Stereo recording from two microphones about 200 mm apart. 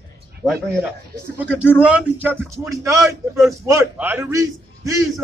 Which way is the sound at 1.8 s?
5° right (ahead or behind).